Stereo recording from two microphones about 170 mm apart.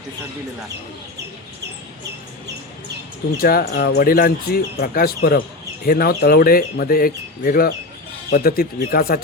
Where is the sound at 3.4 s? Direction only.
60° left (ahead or behind).